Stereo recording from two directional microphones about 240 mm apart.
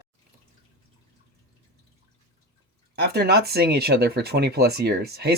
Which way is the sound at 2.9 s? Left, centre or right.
Right.